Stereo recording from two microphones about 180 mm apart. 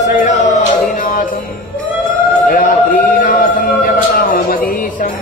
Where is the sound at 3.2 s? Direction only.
50° left (ahead or behind).